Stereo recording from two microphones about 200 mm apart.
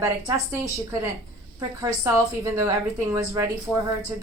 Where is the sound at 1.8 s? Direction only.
15° right (ahead or behind).